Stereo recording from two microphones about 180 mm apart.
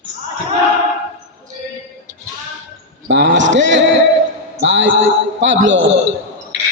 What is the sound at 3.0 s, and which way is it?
A man's voice, 80° right.